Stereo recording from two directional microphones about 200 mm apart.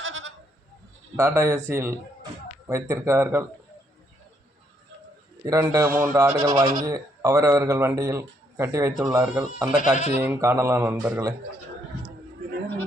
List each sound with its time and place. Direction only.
0.0 s goat: 75° right (ahead or behind)
1.1 s a man's voice: 10° right (ahead or behind)
5.5 s a man's voice: 15° right (ahead or behind)
10.2 s a man's voice: 15° right (ahead or behind)